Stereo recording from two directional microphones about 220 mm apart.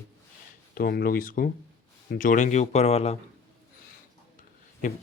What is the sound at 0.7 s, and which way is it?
Speech, 45° left (ahead or behind).